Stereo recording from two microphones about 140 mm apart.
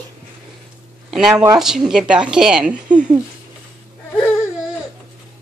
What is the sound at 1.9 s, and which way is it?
Speech, 5° right (ahead or behind).